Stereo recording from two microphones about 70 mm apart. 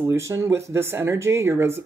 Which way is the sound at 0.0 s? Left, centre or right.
Right.